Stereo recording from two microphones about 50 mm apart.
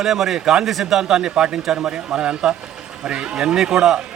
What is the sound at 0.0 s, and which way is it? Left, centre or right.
A man's voice, centre.